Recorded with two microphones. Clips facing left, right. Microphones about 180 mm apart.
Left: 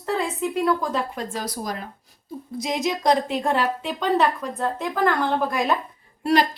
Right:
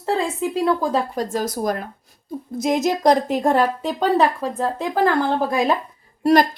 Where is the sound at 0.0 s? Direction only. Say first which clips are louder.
Right 3 dB; 30° right (ahead or behind).